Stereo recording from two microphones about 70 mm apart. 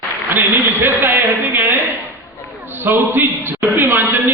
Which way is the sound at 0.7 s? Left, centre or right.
Right.